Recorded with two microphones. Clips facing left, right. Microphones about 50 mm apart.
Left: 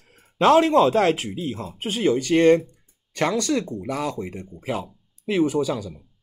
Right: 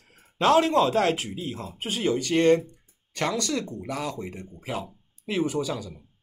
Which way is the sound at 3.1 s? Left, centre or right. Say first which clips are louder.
Left 5 dB; left.